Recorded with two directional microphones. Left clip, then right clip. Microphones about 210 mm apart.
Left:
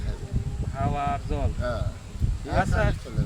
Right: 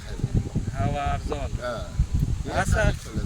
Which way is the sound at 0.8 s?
20° right (ahead or behind).